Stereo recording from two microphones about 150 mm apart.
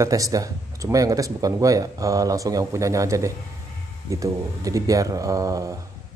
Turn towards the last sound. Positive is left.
turn(degrees=-20)  # may be behind; listen again after turning